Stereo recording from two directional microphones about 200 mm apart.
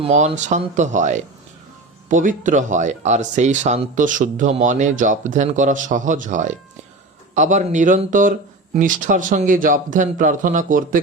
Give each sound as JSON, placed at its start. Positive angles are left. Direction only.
{"t": 0.0, "sound": "speech", "side_deg": -30}